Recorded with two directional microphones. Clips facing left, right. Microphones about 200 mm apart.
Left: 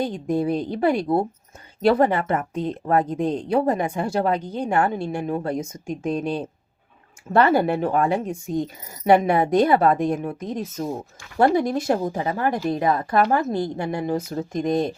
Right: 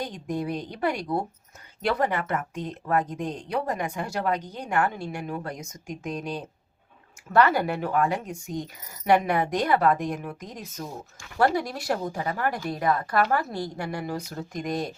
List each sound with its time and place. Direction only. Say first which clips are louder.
0.0 s speech: left 7 dB; 30° left (ahead or behind)